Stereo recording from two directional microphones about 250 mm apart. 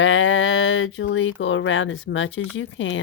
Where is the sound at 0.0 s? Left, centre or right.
Left.